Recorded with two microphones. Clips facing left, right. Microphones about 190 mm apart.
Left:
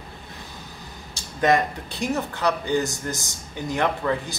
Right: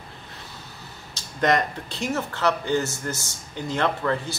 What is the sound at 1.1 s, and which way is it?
Speech, 15° left (ahead or behind).